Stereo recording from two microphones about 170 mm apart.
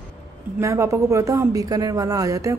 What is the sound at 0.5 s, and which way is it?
A woman's voice, 15° right (ahead or behind).